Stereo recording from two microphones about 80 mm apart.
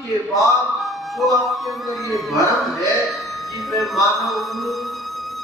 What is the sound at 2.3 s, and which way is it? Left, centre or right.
Speech, left.